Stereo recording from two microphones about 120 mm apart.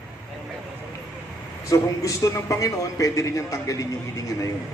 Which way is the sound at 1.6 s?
25° left (ahead or behind).